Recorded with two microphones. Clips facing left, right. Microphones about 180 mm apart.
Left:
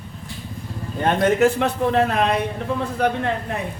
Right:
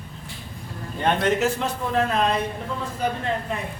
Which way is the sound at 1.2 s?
60° left (ahead or behind).